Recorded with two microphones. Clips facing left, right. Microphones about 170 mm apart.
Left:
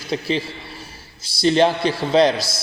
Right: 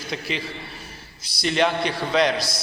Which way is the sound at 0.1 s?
30° left (ahead or behind).